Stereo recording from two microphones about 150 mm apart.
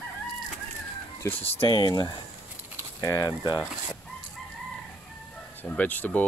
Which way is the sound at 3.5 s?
5° right (ahead or behind).